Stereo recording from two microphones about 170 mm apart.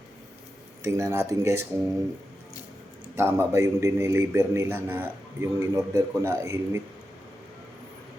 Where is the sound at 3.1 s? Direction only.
15° right (ahead or behind).